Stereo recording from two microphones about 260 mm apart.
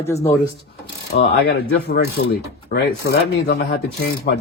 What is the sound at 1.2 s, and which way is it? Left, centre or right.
Speech, left.